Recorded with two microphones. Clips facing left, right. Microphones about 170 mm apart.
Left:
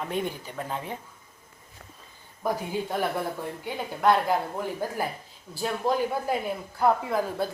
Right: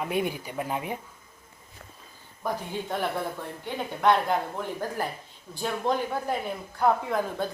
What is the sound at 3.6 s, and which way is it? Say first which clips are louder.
A woman's voice: even; 5° left (ahead or behind).